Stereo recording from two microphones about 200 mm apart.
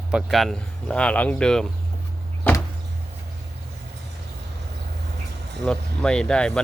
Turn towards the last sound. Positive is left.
turn(degrees=5)  # may be behind; listen again after turning